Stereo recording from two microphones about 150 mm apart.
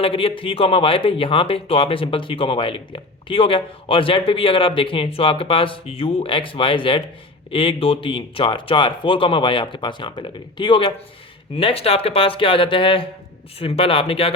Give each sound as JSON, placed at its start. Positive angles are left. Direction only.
{"t": 0.0, "sound": "speech", "side_deg": 40}